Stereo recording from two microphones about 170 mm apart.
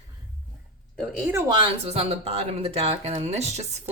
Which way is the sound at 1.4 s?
30° right (ahead or behind).